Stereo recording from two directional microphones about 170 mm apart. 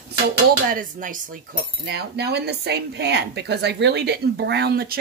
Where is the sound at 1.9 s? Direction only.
75° right (ahead or behind).